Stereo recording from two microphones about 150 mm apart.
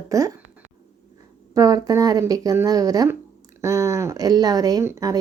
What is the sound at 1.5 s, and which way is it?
Speech, 25° right (ahead or behind).